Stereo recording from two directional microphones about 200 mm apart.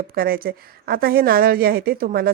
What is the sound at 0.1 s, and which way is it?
Speech, 45° right (ahead or behind).